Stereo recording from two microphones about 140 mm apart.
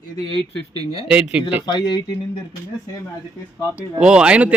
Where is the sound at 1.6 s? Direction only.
30° left (ahead or behind).